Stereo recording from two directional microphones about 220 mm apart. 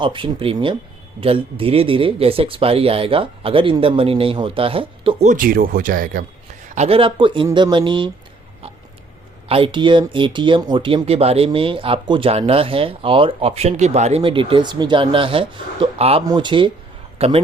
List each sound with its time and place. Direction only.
0.0 s speech: 20° right (ahead or behind); by 6.2 s 40° right (ahead or behind)
6.7 s speech: 25° right (ahead or behind)
9.5 s a man's voice: 25° right (ahead or behind)